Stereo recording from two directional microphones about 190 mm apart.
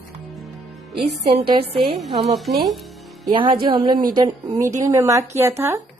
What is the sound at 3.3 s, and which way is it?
A woman's voice, 25° right (ahead or behind).